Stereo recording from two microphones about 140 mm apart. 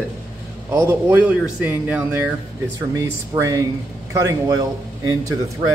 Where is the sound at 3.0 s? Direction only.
25° right (ahead or behind).